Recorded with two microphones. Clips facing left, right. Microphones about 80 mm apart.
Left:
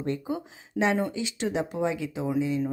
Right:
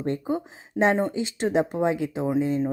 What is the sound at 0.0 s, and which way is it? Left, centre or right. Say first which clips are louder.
A woman's voice: right 3 dB; right.